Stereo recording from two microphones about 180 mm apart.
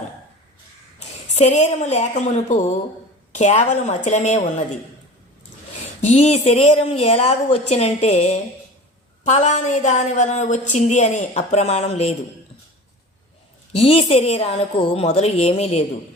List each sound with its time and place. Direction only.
0.9 s a woman's voice: 40° left (ahead or behind)
6.0 s a woman's voice: 40° left (ahead or behind)
13.7 s a woman's voice: 35° left (ahead or behind)